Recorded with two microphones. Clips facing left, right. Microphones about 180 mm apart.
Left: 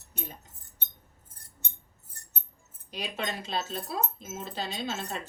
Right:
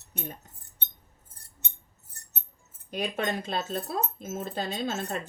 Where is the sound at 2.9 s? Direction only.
50° right (ahead or behind).